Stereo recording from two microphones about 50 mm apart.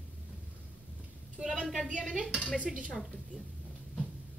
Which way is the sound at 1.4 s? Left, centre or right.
Centre.